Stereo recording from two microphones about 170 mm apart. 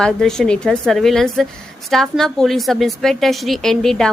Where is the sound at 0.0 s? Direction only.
5° left (ahead or behind).